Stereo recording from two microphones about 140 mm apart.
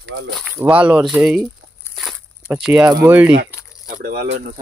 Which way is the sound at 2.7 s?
10° right (ahead or behind).